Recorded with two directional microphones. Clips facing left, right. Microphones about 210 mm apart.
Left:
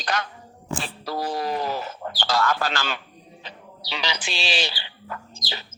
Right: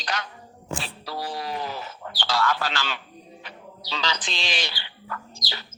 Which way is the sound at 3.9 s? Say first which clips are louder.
Even; 10° left (ahead or behind).